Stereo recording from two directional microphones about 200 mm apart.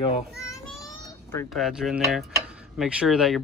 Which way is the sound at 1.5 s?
Centre (ahead or behind).